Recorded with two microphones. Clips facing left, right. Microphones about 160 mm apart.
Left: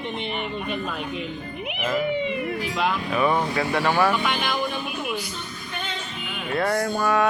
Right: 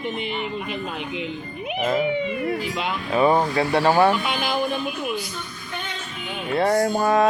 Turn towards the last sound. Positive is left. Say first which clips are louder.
# right 3 dB
turn(degrees=-35)  # may be behind; listen again after turning